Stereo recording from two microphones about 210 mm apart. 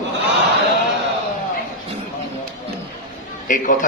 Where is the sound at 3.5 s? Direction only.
40° left (ahead or behind).